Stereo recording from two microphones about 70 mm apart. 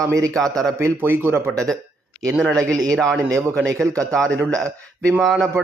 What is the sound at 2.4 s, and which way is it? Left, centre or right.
A man's voice, centre.